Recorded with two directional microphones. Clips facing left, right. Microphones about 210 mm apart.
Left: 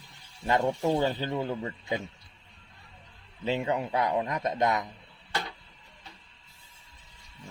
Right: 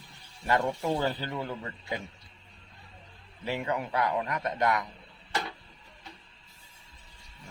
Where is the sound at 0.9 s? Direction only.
15° left (ahead or behind).